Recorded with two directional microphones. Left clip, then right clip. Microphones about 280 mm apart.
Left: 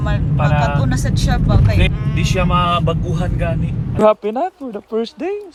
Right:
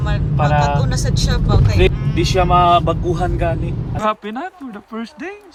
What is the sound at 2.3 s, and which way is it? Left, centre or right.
Speech, right.